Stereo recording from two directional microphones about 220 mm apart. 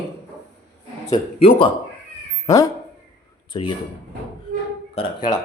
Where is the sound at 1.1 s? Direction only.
25° left (ahead or behind).